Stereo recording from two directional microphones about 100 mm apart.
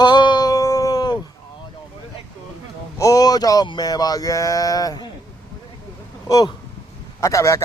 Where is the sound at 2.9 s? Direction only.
35° left (ahead or behind).